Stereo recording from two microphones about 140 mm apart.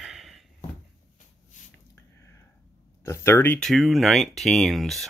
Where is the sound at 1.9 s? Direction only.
20° left (ahead or behind).